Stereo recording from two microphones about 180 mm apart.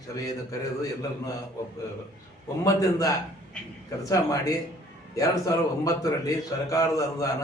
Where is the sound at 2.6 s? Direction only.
20° left (ahead or behind).